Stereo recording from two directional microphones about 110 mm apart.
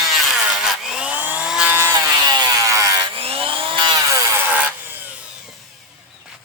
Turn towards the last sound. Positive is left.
turn(degrees=-15)  # may be behind; listen again after turning